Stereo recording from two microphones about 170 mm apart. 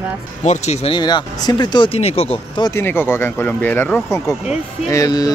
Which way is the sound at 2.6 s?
15° left (ahead or behind).